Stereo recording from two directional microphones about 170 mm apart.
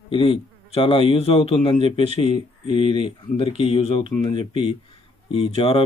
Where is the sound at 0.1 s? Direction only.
30° left (ahead or behind).